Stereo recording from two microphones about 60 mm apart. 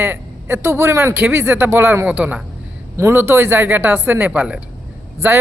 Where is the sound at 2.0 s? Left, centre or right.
Right.